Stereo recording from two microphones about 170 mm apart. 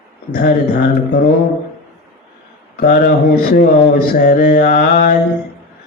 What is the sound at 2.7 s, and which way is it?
Speech, 60° left (ahead or behind).